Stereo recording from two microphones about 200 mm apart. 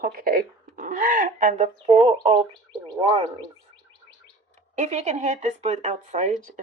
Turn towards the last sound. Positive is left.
turn(degrees=-40)  # may be behind; listen again after turning